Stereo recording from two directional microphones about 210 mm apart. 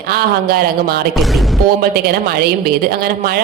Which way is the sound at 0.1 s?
45° right (ahead or behind).